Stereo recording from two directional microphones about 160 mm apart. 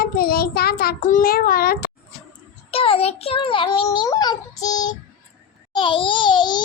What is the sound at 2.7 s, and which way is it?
A child's voice, 35° left (ahead or behind).